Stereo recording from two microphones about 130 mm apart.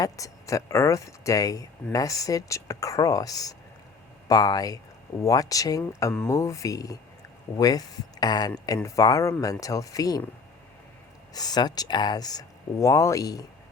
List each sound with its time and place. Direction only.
0.0 s speech: 25° left (ahead or behind)
11.3 s speech: 30° left (ahead or behind)